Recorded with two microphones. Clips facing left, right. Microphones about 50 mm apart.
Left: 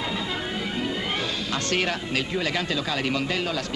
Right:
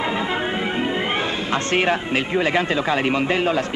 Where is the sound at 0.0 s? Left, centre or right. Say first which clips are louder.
Right 7 dB; right.